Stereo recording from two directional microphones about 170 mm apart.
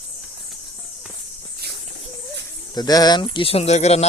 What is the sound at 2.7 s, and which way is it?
Speech, 25° left (ahead or behind).